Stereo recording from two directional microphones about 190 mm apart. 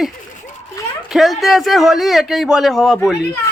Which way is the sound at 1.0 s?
Centre (ahead or behind).